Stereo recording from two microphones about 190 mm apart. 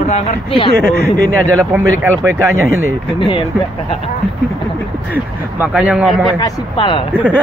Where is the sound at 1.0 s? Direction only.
50° left (ahead or behind).